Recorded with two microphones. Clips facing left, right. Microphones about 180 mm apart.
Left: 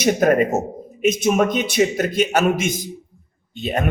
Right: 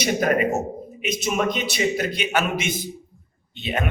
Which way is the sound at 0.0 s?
45° left (ahead or behind).